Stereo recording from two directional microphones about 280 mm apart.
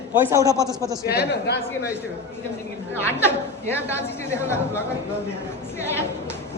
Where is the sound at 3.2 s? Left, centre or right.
Centre.